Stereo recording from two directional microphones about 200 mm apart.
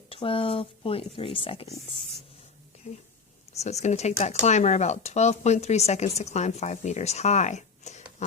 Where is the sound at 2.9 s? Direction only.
35° left (ahead or behind).